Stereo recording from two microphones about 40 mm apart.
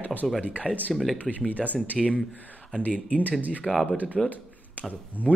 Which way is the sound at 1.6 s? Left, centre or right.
Centre.